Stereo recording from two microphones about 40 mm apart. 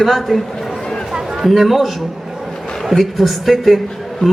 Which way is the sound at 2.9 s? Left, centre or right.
Centre.